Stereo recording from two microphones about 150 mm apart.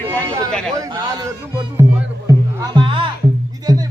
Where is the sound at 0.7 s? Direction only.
25° right (ahead or behind).